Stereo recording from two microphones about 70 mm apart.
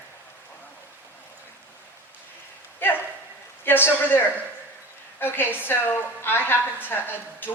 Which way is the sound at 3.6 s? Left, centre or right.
Left.